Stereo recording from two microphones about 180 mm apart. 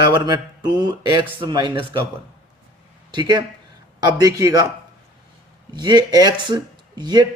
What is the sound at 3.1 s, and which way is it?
Speech, 25° right (ahead or behind).